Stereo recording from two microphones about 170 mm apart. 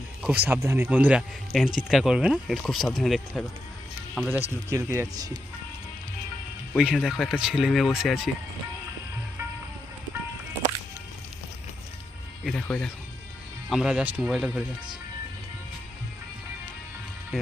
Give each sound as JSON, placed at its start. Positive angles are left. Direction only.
{"t": 0.2, "sound": "speech", "side_deg": -10}
{"t": 4.7, "sound": "speech", "side_deg": -15}
{"t": 6.7, "sound": "speech", "side_deg": -5}
{"t": 12.5, "sound": "speech", "side_deg": 5}
{"t": 17.3, "sound": "speech", "side_deg": 0}